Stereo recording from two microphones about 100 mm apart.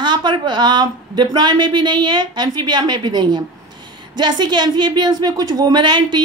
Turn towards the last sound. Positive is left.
turn(degrees=-50)  # may be behind; listen again after turning